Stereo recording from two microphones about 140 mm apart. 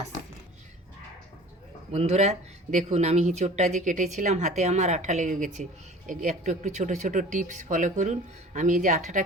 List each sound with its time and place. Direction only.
1.9 s speech: 50° right (ahead or behind)